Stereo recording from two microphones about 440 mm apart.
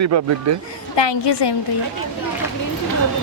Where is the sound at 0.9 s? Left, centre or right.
Left.